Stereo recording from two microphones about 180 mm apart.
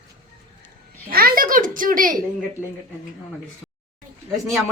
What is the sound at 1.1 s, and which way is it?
A child's voice, 55° right (ahead or behind).